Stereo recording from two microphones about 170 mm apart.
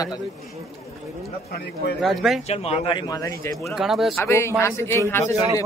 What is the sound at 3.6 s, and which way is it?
Speech, centre (ahead or behind).